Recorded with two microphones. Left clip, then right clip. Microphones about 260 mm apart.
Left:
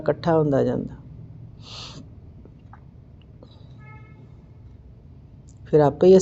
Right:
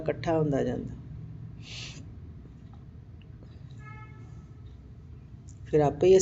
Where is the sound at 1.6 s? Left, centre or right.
Left.